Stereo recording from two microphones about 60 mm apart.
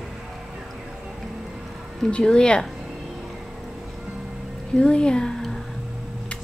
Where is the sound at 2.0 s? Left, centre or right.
Centre.